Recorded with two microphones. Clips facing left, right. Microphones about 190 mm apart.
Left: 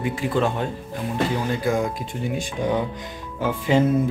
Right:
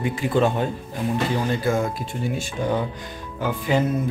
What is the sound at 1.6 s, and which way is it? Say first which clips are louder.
Speech: even; 15° left (ahead or behind).